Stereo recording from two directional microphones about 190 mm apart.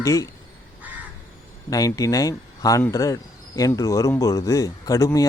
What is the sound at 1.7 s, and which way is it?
Speech, 20° left (ahead or behind).